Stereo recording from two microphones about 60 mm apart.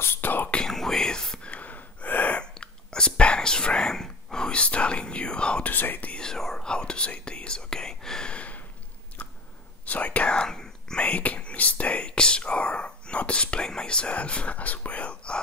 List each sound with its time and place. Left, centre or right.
0.0 s whispering: left
0.5 s whispering: centre
5.7 s whispering: left
6.1 s whispering: centre
9.2 s chewing: left
9.8 s whispering: left